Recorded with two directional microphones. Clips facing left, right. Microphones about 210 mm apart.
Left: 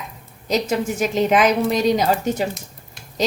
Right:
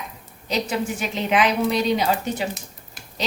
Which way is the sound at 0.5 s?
45° left (ahead or behind).